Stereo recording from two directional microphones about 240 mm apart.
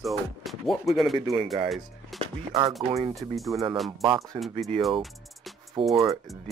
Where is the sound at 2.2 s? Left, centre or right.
Right.